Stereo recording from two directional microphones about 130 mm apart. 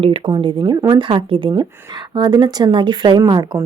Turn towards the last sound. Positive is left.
turn(degrees=-30)  # may be behind; listen again after turning